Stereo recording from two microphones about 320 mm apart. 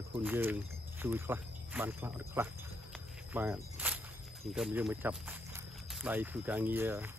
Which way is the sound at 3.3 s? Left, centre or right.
Centre.